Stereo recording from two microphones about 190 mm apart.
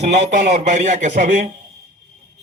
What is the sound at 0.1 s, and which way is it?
A man's voice, 35° right (ahead or behind).